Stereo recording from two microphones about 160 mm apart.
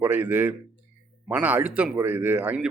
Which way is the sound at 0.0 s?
10° right (ahead or behind).